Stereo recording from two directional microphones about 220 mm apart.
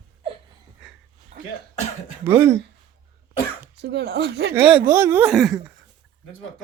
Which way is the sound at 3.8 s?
50° right (ahead or behind).